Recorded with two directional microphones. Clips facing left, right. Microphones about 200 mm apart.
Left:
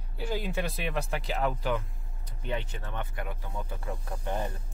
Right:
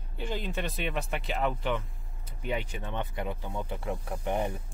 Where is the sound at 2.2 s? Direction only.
10° right (ahead or behind).